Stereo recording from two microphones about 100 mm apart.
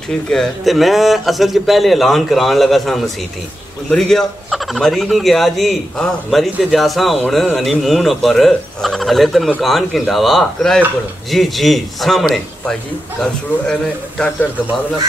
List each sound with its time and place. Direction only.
0.3 s a man's voice: centre (ahead or behind)